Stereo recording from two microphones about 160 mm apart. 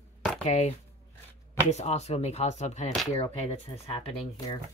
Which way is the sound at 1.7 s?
45° left (ahead or behind).